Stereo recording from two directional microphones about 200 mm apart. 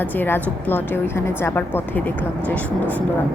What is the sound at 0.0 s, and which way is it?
Speech, 10° left (ahead or behind).